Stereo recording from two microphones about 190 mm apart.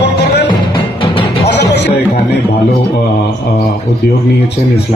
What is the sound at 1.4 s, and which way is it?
Music, 60° left (ahead or behind).